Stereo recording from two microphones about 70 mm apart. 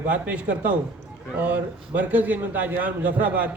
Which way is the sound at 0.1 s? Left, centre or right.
Right.